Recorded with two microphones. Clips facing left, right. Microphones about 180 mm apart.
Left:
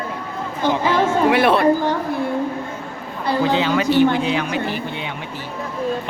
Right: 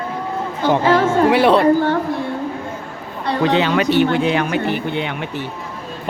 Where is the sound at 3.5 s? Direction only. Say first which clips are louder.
Right 2 dB; 65° right (ahead or behind).